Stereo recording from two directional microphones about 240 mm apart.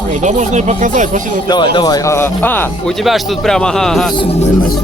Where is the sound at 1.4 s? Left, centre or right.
Centre.